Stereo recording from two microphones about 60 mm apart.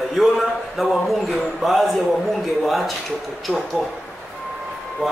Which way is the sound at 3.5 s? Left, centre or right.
Centre.